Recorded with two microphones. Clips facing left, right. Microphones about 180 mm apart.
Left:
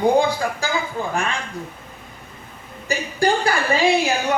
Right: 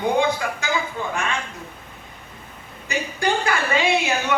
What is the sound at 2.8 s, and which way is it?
A woman's voice, 35° left (ahead or behind).